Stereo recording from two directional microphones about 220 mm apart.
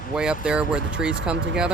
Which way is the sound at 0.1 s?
5° right (ahead or behind).